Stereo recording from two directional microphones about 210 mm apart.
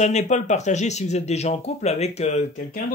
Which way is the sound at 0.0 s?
35° left (ahead or behind).